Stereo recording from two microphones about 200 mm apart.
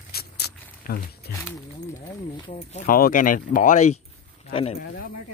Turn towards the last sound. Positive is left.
turn(degrees=30)  # may be behind; listen again after turning